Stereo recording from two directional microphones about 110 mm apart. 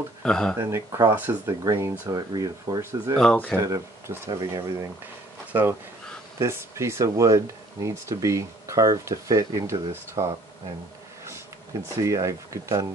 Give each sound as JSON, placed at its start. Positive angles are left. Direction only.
{"t": 0.2, "sound": "speech", "side_deg": 5}
{"t": 0.6, "sound": "speech", "side_deg": -25}
{"t": 1.1, "sound": "speech", "side_deg": -20}
{"t": 1.6, "sound": "speech", "side_deg": -30}
{"t": 3.2, "sound": "speech", "side_deg": 10}
{"t": 3.6, "sound": "speech", "side_deg": -30}
{"t": 5.5, "sound": "speech", "side_deg": -15}
{"t": 12.0, "sound": "speech", "side_deg": -30}